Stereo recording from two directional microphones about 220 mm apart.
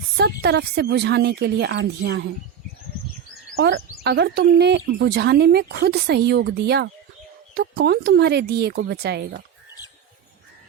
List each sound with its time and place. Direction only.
0.2 s a woman's voice: 45° right (ahead or behind)
3.5 s a woman's voice: 50° right (ahead or behind)